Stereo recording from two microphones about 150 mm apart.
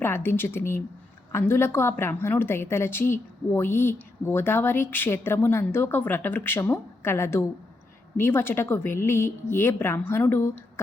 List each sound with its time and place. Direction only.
0.0 s a woman's voice: 15° left (ahead or behind)